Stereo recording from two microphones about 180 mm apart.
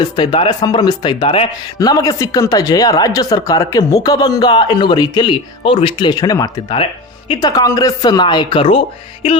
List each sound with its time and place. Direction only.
0.0 s speech: 25° left (ahead or behind)